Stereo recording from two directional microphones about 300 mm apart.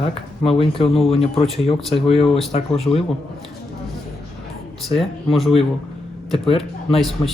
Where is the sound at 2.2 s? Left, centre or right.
Centre.